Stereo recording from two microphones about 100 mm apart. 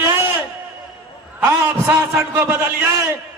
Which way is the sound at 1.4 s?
25° right (ahead or behind).